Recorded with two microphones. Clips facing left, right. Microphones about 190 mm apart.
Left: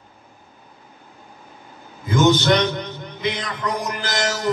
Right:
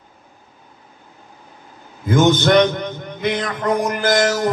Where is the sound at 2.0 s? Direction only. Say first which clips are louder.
Right 2 dB; 55° right (ahead or behind).